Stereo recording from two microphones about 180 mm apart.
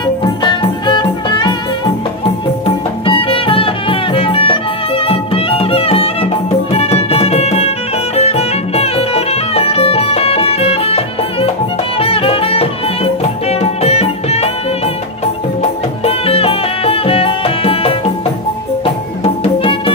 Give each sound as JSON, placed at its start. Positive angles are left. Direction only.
{"t": 0.0, "sound": "music", "side_deg": 25}
{"t": 2.6, "sound": "music", "side_deg": 30}
{"t": 15.6, "sound": "music", "side_deg": 35}
{"t": 19.2, "sound": "music", "side_deg": 30}